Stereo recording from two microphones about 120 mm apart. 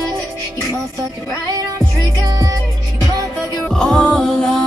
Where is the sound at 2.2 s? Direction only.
30° right (ahead or behind).